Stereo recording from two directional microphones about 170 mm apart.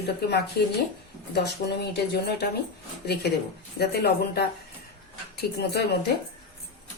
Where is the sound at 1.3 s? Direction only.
75° left (ahead or behind).